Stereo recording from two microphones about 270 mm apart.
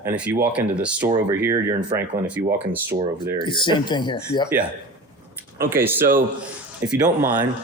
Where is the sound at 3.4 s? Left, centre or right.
Centre.